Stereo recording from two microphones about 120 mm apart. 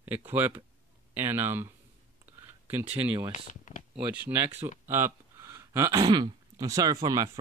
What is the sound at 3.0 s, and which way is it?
Speech, 45° right (ahead or behind).